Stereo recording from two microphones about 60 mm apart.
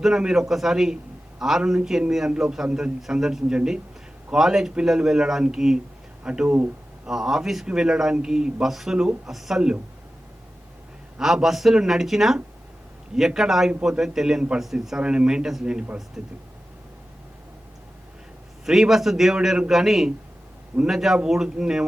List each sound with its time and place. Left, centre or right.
0.0 s a man's voice: centre
7.1 s a man's voice: centre
11.2 s a man's voice: centre
18.6 s a man's voice: centre